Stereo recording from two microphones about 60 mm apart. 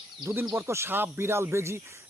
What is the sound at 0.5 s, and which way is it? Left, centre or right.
Speech, right.